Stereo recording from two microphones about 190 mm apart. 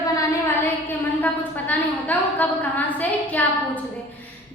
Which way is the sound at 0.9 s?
10° left (ahead or behind).